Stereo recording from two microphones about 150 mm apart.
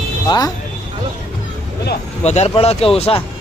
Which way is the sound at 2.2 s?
45° left (ahead or behind).